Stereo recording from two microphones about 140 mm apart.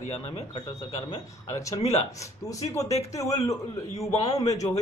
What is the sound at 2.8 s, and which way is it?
Speech, 50° left (ahead or behind).